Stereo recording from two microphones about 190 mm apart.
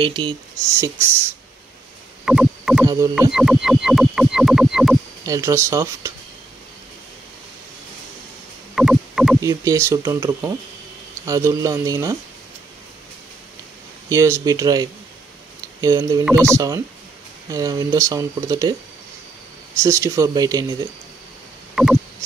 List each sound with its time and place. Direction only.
0.0 s speech: 25° right (ahead or behind)
2.2 s rowboat: 5° right (ahead or behind)
2.8 s speech: 15° right (ahead or behind)
3.3 s a sound: centre (ahead or behind)
5.2 s speech: 15° right (ahead or behind)
8.7 s rowboat: 5° right (ahead or behind)
9.4 s speech: 15° right (ahead or behind)
14.0 s speech: 15° right (ahead or behind)
19.8 s speech: 15° right (ahead or behind)
21.8 s a sound: centre (ahead or behind)